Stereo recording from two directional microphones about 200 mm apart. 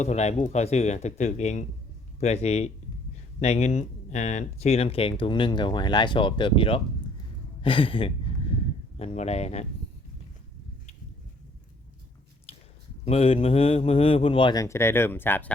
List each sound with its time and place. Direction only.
0.0 s speech: 35° left (ahead or behind)
12.5 s a sound: 30° left (ahead or behind)
13.1 s speech: 30° left (ahead or behind); by 15.5 s 10° left (ahead or behind)